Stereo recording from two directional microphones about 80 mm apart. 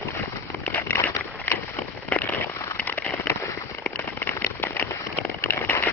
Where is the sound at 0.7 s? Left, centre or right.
Left.